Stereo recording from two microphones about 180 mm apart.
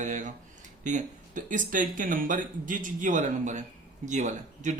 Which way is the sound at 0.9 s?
45° right (ahead or behind).